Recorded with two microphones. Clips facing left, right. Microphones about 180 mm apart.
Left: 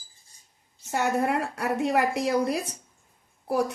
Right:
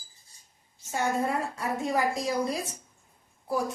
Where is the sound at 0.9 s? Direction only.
65° left (ahead or behind).